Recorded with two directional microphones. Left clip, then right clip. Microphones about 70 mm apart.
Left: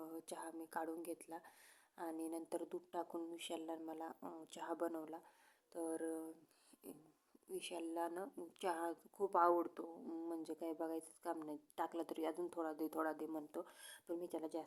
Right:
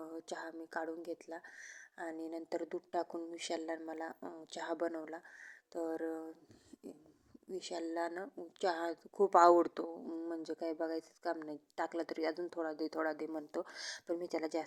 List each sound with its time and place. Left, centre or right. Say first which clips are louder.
0.0 s a woman's voice: right 5 dB; right
4.2 s speech: right 4 dB; centre
4.5 s a woman's voice: right 6 dB; right
7.5 s a woman's voice: right 5 dB; right
9.3 s speech: right 9 dB; right
9.9 s speech: right 5 dB; right
13.3 s speech: right 7 dB; right